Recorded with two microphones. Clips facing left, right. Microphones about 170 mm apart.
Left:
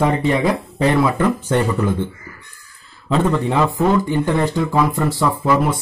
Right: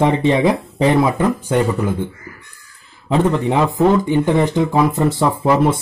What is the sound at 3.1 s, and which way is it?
Speech, 15° right (ahead or behind).